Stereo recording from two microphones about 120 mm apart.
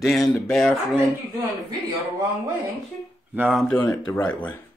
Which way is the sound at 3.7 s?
30° left (ahead or behind).